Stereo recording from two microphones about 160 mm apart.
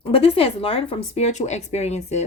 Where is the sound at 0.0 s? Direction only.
35° left (ahead or behind).